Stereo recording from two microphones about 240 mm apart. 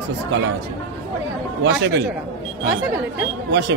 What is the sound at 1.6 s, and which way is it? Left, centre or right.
Speech, right.